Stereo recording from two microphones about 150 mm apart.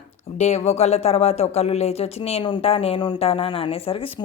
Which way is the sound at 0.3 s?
50° left (ahead or behind).